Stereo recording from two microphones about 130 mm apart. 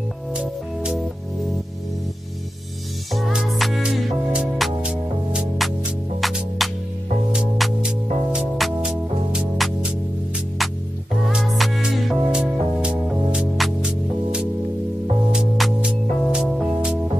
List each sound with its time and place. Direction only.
0.3 s music: 5° right (ahead or behind)
3.1 s music: centre (ahead or behind)
11.2 s music: centre (ahead or behind)